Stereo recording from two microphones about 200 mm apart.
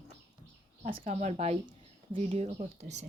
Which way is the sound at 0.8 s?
40° right (ahead or behind).